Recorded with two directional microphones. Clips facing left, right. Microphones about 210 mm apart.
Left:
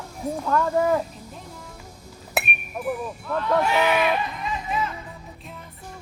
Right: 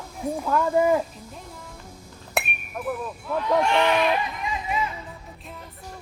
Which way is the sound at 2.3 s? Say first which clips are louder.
Left 1 dB; 5° left (ahead or behind).